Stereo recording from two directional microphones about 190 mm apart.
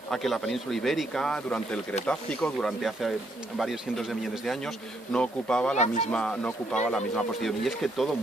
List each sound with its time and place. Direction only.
0.1 s speech: centre (ahead or behind)
5.7 s speech: 35° left (ahead or behind)
6.1 s speech: 5° left (ahead or behind)